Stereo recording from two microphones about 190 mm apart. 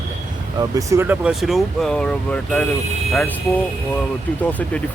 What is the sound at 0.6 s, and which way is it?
Speech, 15° right (ahead or behind).